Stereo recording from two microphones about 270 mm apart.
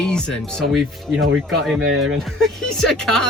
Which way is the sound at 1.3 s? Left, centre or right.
Right.